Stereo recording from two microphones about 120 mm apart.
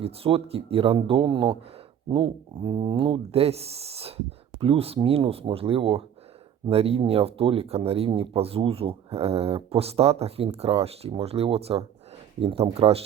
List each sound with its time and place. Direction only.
0.0 s speech: 50° right (ahead or behind)